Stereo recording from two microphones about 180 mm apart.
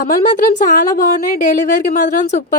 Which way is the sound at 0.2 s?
50° left (ahead or behind).